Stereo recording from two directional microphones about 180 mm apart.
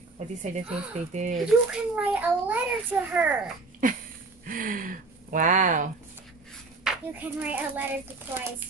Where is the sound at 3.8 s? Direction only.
45° right (ahead or behind).